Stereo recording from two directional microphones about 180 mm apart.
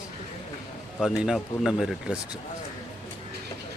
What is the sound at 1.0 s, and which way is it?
Speech, 5° right (ahead or behind).